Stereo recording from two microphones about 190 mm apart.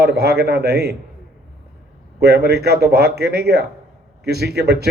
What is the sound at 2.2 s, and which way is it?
A man's voice, 60° right (ahead or behind).